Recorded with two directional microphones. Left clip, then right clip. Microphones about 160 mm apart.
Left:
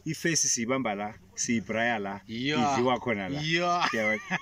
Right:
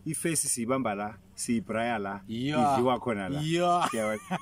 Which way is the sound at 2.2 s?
15° right (ahead or behind).